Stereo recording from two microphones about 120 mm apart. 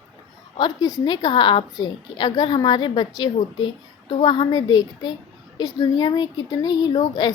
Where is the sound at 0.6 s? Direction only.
30° left (ahead or behind).